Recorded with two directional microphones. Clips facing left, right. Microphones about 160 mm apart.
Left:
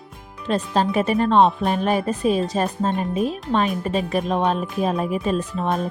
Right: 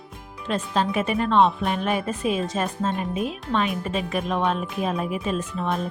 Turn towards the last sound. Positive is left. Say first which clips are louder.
# left 4 dB
turn(degrees=35)  # may be behind; listen again after turning